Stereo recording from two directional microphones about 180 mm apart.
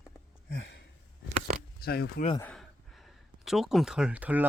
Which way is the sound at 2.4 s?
5° left (ahead or behind).